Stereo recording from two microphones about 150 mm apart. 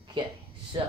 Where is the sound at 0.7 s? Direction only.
30° right (ahead or behind).